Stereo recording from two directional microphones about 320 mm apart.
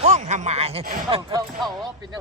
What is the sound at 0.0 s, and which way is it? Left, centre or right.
Speech, right.